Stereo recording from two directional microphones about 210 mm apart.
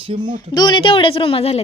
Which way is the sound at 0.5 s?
20° left (ahead or behind).